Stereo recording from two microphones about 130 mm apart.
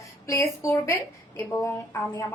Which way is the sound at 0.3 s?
25° left (ahead or behind).